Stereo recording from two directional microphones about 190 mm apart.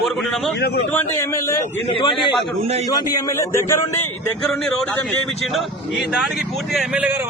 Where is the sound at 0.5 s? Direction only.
60° left (ahead or behind).